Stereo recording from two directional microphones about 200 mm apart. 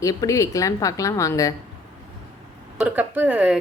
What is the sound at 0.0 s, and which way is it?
A woman's voice, 15° left (ahead or behind).